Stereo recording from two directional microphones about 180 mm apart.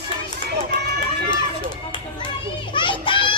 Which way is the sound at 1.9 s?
25° left (ahead or behind).